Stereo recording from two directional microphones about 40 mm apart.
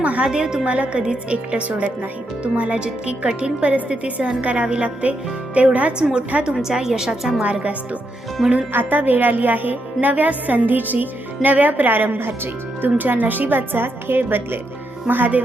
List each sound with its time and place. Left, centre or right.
0.0 s speech: right
0.3 s a woman's voice: centre
0.6 s speech: right
6.1 s a woman's voice: right
8.4 s speech: centre
8.7 s a woman's voice: right
11.9 s a woman's voice: right
15.0 s a woman's voice: right